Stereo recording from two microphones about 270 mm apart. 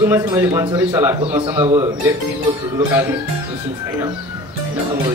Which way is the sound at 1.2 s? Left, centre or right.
Centre.